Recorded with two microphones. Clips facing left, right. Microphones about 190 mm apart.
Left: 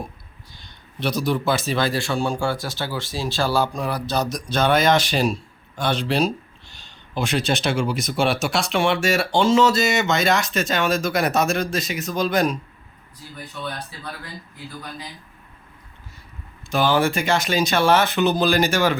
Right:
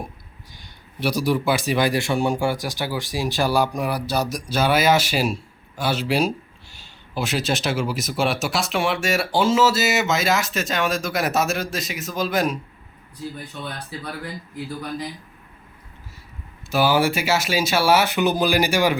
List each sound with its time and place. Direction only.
0.6 s a man's voice: 10° right (ahead or behind)
16.7 s speech: 10° right (ahead or behind)